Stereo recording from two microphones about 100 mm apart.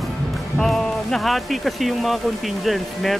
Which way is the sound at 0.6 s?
5° left (ahead or behind).